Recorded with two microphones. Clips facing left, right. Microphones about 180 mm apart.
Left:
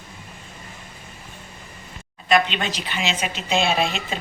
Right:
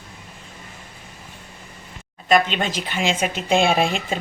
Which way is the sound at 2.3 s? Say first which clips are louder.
Right 2 dB; 45° right (ahead or behind).